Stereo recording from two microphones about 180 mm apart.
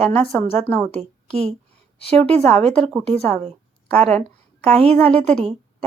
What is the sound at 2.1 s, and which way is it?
Speech, 5° left (ahead or behind).